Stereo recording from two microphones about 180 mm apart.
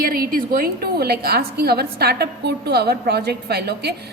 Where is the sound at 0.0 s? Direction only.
55° right (ahead or behind).